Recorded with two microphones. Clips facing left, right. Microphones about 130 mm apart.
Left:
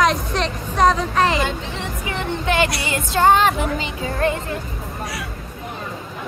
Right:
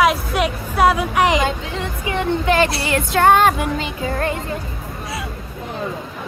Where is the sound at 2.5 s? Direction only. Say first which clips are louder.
Right 2 dB; 35° right (ahead or behind).